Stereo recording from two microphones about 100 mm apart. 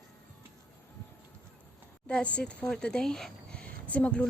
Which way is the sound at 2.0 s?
10° left (ahead or behind).